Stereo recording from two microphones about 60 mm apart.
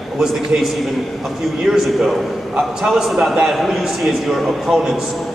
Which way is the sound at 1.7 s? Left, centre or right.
Centre.